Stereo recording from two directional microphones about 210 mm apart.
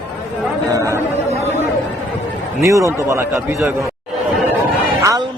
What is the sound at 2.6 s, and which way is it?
A man's voice, 15° right (ahead or behind).